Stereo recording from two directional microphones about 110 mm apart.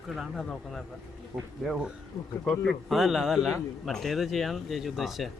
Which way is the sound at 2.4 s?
10° left (ahead or behind).